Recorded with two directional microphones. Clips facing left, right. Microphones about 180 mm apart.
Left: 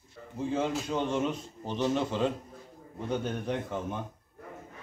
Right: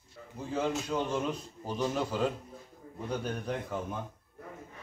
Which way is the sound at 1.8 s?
5° right (ahead or behind).